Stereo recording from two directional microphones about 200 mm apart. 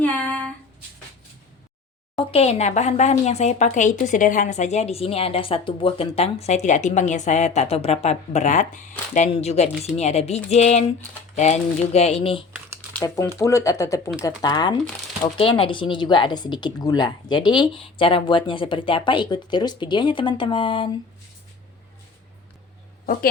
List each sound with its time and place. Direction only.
0.0 s a sound: 5° left (ahead or behind)
2.1 s a woman's voice: 30° left (ahead or behind)
12.9 s speech: 10° left (ahead or behind)